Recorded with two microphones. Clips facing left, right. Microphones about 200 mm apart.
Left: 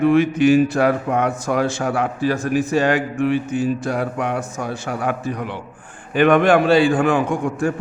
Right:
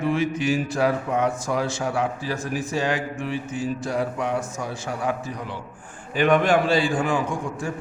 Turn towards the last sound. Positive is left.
turn(degrees=60)  # may be behind; listen again after turning